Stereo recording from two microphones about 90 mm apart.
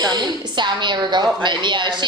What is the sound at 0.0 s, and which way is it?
A woman's voice, 50° right (ahead or behind).